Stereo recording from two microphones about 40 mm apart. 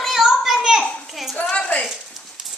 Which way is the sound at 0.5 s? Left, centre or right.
Centre.